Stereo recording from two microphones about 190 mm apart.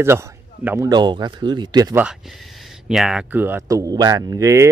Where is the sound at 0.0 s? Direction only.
15° right (ahead or behind).